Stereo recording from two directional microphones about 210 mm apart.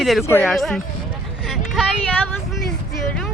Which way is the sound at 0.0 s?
Centre (ahead or behind).